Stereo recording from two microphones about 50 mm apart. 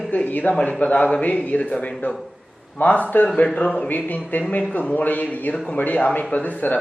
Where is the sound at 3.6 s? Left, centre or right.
Left.